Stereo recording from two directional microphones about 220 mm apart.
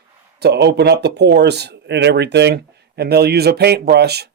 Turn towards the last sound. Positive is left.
turn(degrees=-50)  # may be behind; listen again after turning